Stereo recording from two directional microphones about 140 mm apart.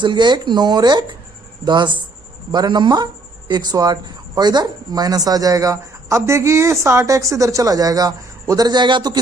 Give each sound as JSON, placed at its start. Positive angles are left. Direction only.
{"t": 0.0, "sound": "speech", "side_deg": -35}